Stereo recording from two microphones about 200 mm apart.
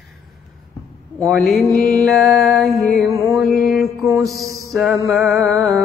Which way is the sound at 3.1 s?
20° right (ahead or behind).